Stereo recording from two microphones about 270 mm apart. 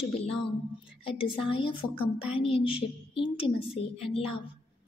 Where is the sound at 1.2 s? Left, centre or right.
Centre.